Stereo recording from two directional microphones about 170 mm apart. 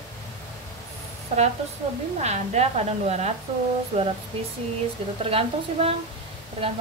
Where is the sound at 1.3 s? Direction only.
40° right (ahead or behind).